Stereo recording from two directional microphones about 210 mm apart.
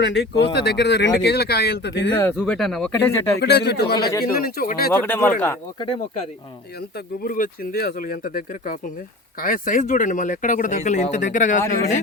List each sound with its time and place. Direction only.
0.0 s speech: 60° left (ahead or behind)
2.1 s speech: 5° left (ahead or behind)
3.4 s speech: 50° left (ahead or behind)
3.9 s speech: 20° left (ahead or behind)
4.2 s speech: 45° left (ahead or behind)
4.9 s speech: 10° left (ahead or behind)
6.9 s speech: 45° left (ahead or behind)